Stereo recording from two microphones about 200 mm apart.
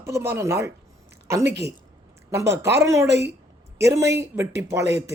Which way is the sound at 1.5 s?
55° right (ahead or behind).